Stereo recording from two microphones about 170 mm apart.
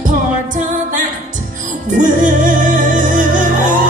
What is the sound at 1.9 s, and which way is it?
Music, 50° right (ahead or behind).